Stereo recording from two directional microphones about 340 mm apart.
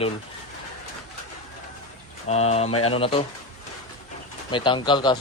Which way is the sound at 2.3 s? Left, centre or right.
Centre.